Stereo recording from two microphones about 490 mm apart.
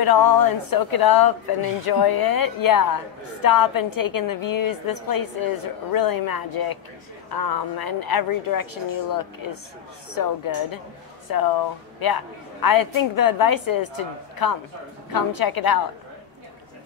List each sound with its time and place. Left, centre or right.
0.0 s a woman's voice: left